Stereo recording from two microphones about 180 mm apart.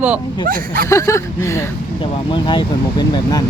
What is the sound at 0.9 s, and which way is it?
Speech, 15° left (ahead or behind).